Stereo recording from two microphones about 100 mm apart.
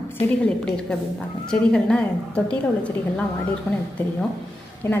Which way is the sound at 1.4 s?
10° left (ahead or behind).